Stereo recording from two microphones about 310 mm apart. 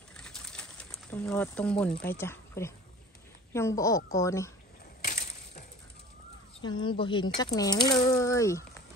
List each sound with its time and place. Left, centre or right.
0.2 s a sound: centre
2.0 s speech: centre
5.0 s crushing: left
6.6 s speech: centre